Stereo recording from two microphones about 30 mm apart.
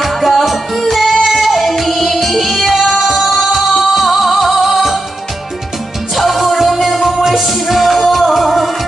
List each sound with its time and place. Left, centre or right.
0.0 s music: centre
6.1 s music: centre